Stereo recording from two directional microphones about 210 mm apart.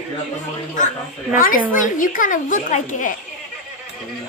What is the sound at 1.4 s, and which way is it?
A woman's voice, 40° left (ahead or behind).